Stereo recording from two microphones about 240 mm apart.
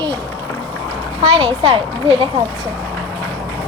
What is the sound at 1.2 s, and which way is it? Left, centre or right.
A child's voice, centre.